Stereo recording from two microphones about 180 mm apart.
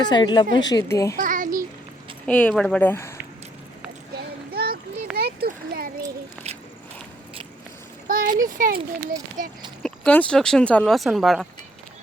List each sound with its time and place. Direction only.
0.0 s a woman's voice: 25° left (ahead or behind)
1.2 s child singing: 45° right (ahead or behind)
2.2 s speech: 5° left (ahead or behind)
4.5 s a sound: 60° right (ahead or behind)
8.0 s a sound: 50° right (ahead or behind)
9.4 s speech: 50° right (ahead or behind)
9.8 s speech: 5° left (ahead or behind)